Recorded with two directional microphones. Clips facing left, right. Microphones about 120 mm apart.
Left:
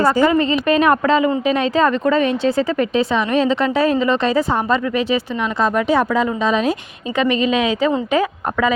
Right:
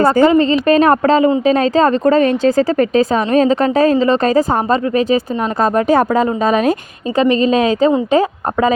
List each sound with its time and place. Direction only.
0.0 s a woman's voice: 50° right (ahead or behind)
0.3 s speech: 35° right (ahead or behind); by 6.7 s 50° right (ahead or behind)
7.2 s speech: 35° right (ahead or behind)